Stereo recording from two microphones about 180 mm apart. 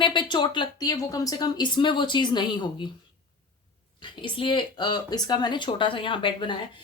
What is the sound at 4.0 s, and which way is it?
A woman's voice, 25° left (ahead or behind).